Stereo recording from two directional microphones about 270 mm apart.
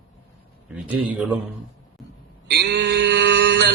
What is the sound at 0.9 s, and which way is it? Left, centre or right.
Speech, centre.